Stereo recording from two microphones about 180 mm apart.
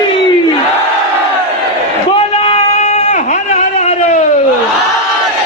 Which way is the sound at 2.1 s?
30° left (ahead or behind).